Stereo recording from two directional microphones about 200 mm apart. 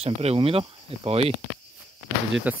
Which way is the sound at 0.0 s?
30° right (ahead or behind).